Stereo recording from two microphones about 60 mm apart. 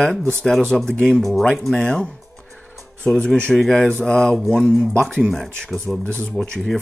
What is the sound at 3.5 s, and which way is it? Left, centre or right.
Speech, centre.